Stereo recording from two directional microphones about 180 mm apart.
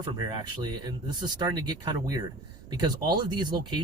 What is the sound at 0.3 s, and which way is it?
Speech, 20° right (ahead or behind).